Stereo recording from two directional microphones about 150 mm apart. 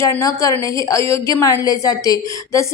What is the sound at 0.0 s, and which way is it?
A woman's voice, 20° left (ahead or behind).